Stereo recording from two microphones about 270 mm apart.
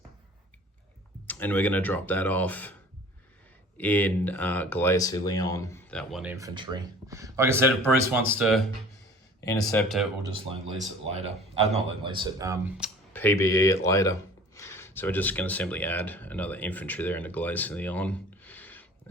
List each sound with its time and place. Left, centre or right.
1.3 s speech: centre
3.8 s speech: centre
6.3 s speech: centre
11.1 s speech: right
13.1 s speech: centre